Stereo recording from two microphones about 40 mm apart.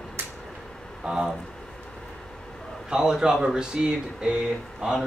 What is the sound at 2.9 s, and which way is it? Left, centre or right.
Speech, centre.